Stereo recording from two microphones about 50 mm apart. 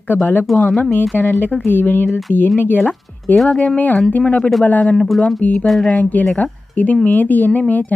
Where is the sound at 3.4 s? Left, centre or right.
Centre.